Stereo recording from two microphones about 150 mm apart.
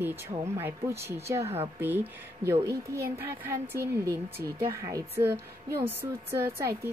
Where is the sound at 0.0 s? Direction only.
15° right (ahead or behind).